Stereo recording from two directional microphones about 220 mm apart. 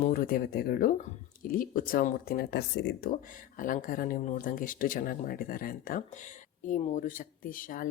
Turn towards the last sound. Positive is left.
turn(degrees=40)  # may be behind; listen again after turning